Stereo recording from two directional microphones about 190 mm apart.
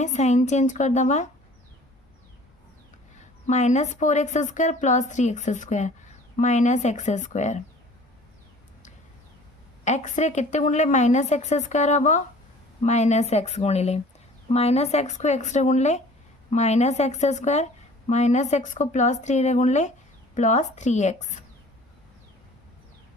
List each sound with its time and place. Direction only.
0.0 s a woman's voice: 35° left (ahead or behind)
3.4 s a woman's voice: 40° left (ahead or behind)
9.8 s a woman's voice: 40° left (ahead or behind)